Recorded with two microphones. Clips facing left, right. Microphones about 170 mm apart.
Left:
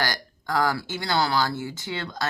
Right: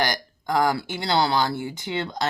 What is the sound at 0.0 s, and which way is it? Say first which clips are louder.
Speech: right 3 dB; 20° right (ahead or behind).